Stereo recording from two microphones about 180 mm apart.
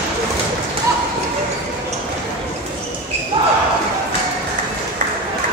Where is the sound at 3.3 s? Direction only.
30° right (ahead or behind).